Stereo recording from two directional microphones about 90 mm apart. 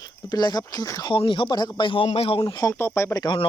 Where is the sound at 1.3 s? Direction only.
60° left (ahead or behind); by 2.4 s 90° left.